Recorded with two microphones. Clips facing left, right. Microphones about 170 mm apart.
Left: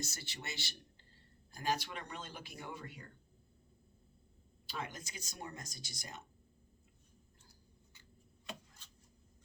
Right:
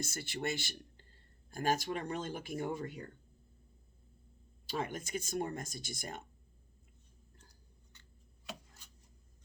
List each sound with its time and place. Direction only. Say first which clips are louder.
0.0 s speech: right 9 dB; 50° right (ahead or behind)
4.8 s speech: right 7 dB; 55° right (ahead or behind)